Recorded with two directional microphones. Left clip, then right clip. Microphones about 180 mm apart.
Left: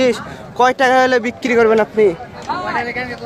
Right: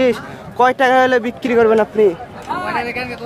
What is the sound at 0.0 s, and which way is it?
Speech, centre (ahead or behind).